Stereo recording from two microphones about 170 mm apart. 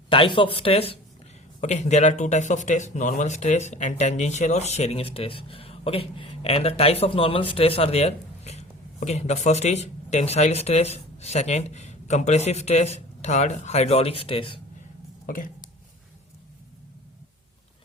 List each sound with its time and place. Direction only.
0.1 s speech: 30° left (ahead or behind)
15.3 s speech: 55° left (ahead or behind)